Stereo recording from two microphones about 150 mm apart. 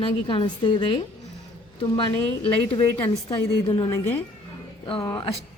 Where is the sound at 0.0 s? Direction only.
35° left (ahead or behind).